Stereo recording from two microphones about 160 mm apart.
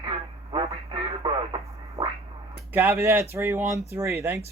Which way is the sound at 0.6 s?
30° right (ahead or behind).